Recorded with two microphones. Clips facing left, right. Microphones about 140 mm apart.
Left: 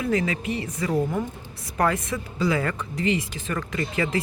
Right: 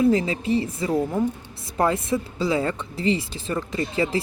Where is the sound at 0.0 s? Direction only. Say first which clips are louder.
Right 5 dB; 30° right (ahead or behind).